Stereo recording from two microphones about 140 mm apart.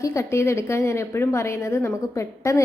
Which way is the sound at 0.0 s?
20° left (ahead or behind).